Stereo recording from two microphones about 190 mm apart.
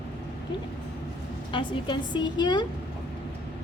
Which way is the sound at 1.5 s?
25° left (ahead or behind).